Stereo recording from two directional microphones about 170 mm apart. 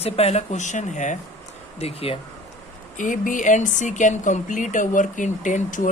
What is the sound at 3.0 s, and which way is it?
Speech, 50° left (ahead or behind).